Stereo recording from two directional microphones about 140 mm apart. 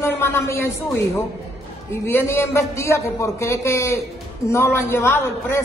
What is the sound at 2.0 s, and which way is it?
A man's voice, 15° left (ahead or behind).